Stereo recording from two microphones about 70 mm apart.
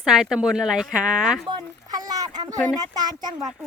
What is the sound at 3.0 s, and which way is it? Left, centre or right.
Speech, right.